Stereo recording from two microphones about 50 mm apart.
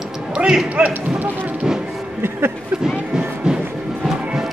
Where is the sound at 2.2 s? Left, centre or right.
Right.